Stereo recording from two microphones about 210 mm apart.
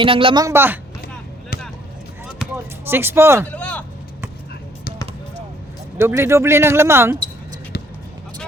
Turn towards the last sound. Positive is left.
turn(degrees=-10)  # may be behind; listen again after turning